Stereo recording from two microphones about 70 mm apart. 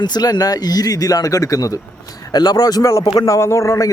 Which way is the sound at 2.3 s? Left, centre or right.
Left.